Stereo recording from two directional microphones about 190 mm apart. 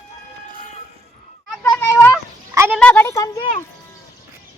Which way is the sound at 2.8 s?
10° left (ahead or behind).